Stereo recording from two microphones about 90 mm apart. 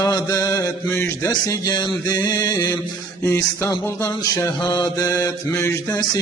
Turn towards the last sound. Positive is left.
turn(degrees=30)  # may be behind; listen again after turning